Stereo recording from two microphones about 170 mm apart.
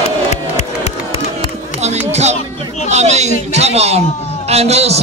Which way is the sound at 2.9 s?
40° right (ahead or behind).